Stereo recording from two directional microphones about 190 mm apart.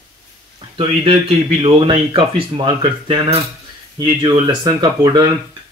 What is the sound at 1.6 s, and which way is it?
Speech, 30° right (ahead or behind).